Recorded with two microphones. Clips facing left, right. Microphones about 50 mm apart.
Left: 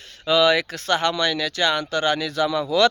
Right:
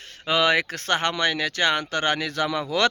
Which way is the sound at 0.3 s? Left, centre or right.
Right.